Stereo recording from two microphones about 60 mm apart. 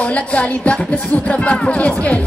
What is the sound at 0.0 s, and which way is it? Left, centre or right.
Speech, left.